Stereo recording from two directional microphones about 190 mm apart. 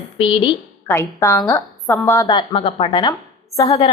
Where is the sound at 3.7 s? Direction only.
30° left (ahead or behind).